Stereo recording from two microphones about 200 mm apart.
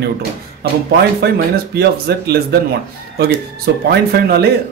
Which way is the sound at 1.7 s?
50° right (ahead or behind).